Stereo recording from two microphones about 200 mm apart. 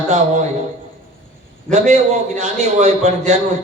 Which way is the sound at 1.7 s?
35° right (ahead or behind).